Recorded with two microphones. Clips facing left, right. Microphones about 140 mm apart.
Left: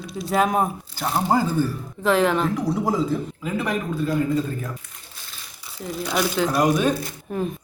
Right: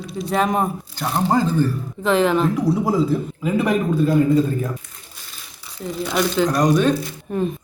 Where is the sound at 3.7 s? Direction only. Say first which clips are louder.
Right 6 dB; 25° right (ahead or behind).